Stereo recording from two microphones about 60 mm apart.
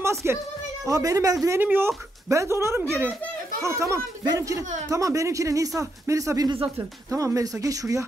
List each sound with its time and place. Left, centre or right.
0.0 s a woman's voice: right
0.8 s speech: right
1.6 s speech: right
2.2 s speech: right
7.1 s speech: right